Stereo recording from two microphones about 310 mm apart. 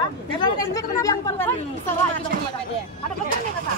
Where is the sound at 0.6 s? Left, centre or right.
Centre.